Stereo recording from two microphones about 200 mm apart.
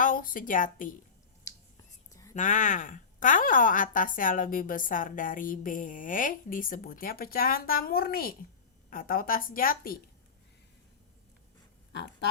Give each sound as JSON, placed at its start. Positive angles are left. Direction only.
{"t": 0.0, "sound": "a woman's voice", "side_deg": 45}
{"t": 2.3, "sound": "a woman's voice", "side_deg": 40}
{"t": 11.9, "sound": "a sound", "side_deg": 60}